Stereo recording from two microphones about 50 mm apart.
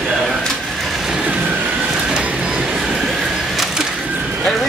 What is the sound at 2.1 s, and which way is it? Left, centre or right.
Music, centre.